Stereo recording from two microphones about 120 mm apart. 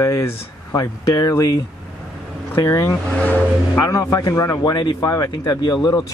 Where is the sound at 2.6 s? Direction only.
25° left (ahead or behind).